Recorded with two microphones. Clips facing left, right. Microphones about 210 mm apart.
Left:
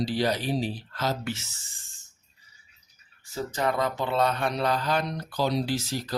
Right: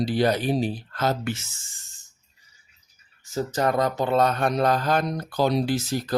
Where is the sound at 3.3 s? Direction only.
45° right (ahead or behind).